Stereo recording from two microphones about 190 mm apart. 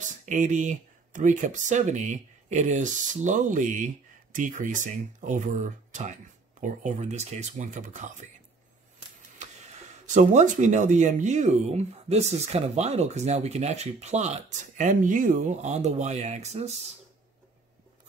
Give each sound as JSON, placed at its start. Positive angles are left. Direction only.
{"t": 0.2, "sound": "speech", "side_deg": -40}
{"t": 10.0, "sound": "speech", "side_deg": -40}